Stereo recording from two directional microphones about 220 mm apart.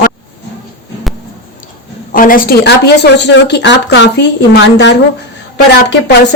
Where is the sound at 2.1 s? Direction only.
40° left (ahead or behind).